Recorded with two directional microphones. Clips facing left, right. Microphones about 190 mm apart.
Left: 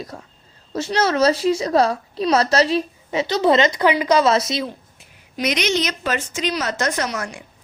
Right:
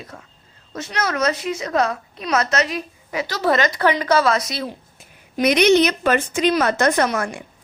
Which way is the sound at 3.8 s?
10° left (ahead or behind).